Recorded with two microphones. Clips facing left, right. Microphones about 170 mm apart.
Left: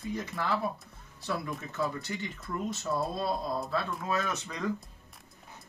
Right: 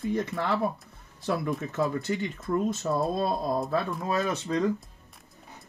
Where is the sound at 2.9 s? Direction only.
55° right (ahead or behind).